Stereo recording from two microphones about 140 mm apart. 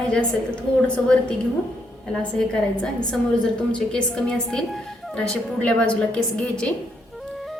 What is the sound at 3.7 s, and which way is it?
A woman's voice, 5° left (ahead or behind).